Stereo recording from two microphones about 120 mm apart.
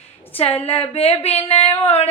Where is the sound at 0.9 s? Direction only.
55° left (ahead or behind).